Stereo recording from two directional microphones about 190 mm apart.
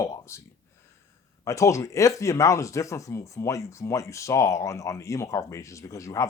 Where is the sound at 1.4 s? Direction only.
15° left (ahead or behind).